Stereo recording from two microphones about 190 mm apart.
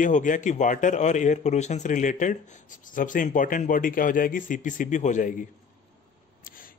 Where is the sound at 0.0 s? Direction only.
45° left (ahead or behind).